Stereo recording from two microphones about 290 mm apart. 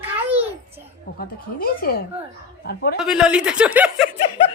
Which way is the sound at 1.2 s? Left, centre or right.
Left.